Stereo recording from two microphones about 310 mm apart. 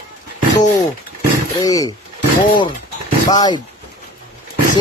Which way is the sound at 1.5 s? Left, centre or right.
Centre.